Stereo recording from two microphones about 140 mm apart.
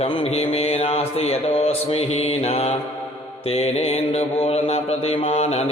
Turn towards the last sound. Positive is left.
turn(degrees=50)  # may be behind; listen again after turning